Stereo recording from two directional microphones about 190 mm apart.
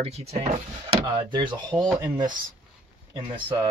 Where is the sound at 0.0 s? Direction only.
35° right (ahead or behind).